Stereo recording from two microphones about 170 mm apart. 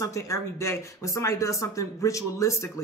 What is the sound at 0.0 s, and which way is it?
A man's voice, 15° left (ahead or behind).